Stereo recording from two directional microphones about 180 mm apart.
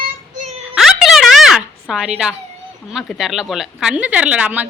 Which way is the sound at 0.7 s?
Centre (ahead or behind).